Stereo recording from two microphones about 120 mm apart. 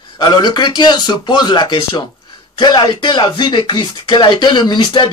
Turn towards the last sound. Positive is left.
turn(degrees=40)  # may be behind; listen again after turning